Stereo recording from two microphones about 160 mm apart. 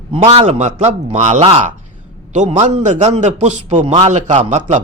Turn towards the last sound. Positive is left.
turn(degrees=-45)  # may be behind; listen again after turning